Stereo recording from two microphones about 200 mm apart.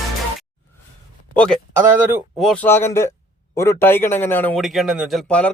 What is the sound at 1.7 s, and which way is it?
A man's voice, 10° right (ahead or behind).